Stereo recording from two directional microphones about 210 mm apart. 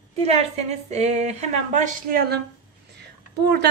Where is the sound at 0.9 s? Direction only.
30° right (ahead or behind).